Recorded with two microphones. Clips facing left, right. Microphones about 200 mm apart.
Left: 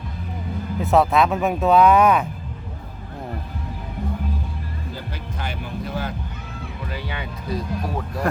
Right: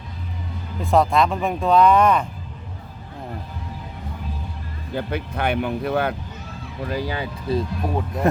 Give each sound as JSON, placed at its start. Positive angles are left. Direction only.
{"t": 0.8, "sound": "speech", "side_deg": 0}
{"t": 4.9, "sound": "speech", "side_deg": -60}
{"t": 6.9, "sound": "speech", "side_deg": -40}